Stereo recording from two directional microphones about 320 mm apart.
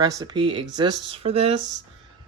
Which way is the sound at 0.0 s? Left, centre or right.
Centre.